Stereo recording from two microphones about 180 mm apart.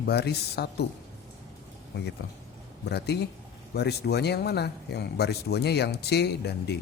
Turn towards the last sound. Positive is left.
turn(degrees=65)  # may be behind; listen again after turning